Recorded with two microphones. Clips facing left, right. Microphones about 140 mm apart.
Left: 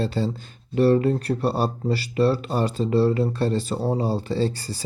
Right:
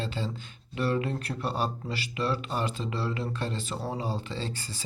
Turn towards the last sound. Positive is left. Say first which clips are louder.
# left 11 dB
turn(degrees=40)  # may be behind; listen again after turning